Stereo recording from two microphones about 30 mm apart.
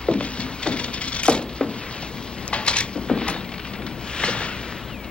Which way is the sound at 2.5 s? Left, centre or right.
Left.